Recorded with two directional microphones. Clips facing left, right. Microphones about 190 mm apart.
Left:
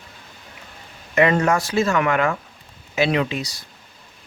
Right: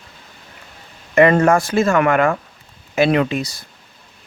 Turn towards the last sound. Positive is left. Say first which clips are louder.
# right 5 dB
turn(degrees=-50)  # may be behind; listen again after turning